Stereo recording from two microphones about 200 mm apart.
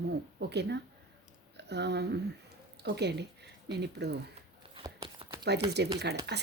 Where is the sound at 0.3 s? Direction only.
55° right (ahead or behind).